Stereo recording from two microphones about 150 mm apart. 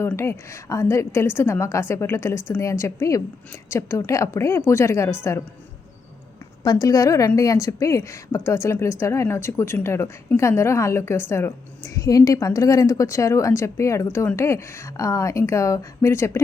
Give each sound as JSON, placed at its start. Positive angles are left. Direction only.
{"t": 0.0, "sound": "a woman's voice", "side_deg": 15}
{"t": 6.7, "sound": "a woman's voice", "side_deg": 25}